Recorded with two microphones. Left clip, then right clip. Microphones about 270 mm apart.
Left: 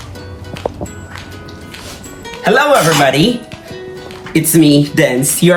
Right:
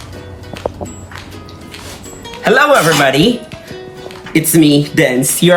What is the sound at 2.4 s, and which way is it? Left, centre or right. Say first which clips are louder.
Speech: right 1 dB; centre.